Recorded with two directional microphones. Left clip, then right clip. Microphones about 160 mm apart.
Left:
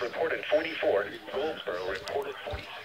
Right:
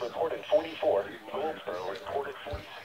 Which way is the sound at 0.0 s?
35° left (ahead or behind).